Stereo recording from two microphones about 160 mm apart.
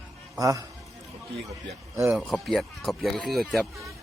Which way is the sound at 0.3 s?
20° right (ahead or behind).